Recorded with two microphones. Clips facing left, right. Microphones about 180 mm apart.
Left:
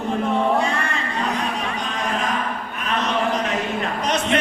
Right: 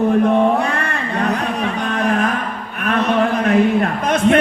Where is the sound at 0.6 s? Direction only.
65° right (ahead or behind).